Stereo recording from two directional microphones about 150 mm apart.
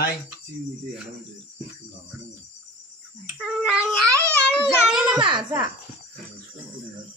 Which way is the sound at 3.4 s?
Centre (ahead or behind).